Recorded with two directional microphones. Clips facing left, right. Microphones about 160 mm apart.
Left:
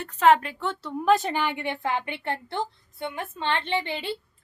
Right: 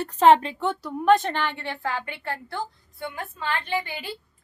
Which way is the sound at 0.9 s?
Centre (ahead or behind).